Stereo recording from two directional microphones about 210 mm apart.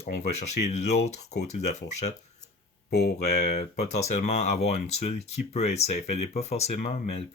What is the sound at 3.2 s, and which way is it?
Speech, 35° left (ahead or behind).